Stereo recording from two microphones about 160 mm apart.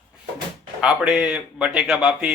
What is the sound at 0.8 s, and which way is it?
Speech, 5° right (ahead or behind).